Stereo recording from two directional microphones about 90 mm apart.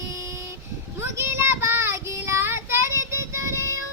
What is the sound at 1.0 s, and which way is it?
Child singing, 30° right (ahead or behind).